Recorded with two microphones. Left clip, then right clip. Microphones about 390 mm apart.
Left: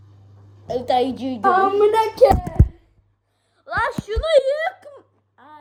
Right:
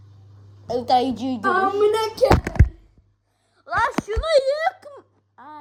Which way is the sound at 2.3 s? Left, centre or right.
Centre.